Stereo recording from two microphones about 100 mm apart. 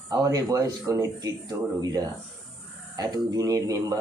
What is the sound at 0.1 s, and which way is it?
Speech, 40° right (ahead or behind).